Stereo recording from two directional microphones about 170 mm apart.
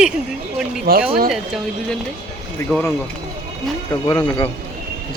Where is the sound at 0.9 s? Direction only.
65° right (ahead or behind).